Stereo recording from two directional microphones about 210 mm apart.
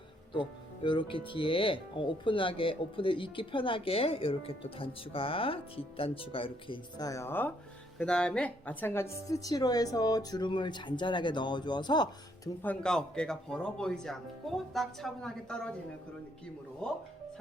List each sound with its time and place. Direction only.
0.3 s a woman's voice: 25° left (ahead or behind)
12.6 s speech: 5° left (ahead or behind)
16.8 s speech: 5° left (ahead or behind)